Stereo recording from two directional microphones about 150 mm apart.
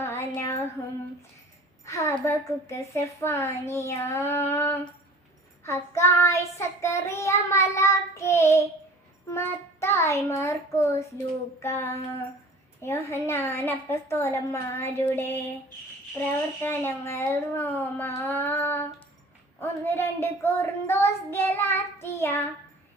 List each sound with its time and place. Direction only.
0.0 s child singing: 15° left (ahead or behind)
1.8 s a woman's voice: 20° left (ahead or behind)
16.6 s a woman's voice: 15° left (ahead or behind)